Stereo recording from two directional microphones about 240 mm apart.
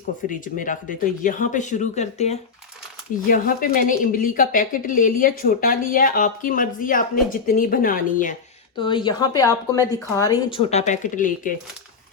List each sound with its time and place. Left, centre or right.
0.3 s speech: left
8.8 s a woman's voice: centre